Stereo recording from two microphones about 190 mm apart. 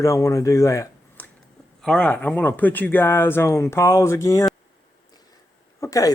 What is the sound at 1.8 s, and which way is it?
Speech, 5° left (ahead or behind).